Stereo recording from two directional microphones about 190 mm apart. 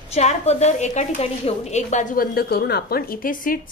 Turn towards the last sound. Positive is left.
turn(degrees=45)  # may be behind; listen again after turning